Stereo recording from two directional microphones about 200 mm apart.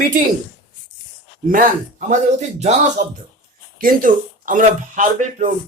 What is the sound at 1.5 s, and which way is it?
Speech, 40° right (ahead or behind).